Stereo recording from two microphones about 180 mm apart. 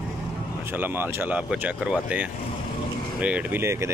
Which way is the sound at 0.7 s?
10° right (ahead or behind).